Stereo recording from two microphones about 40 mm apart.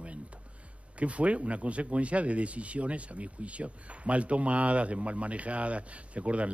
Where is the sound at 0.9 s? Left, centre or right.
Right.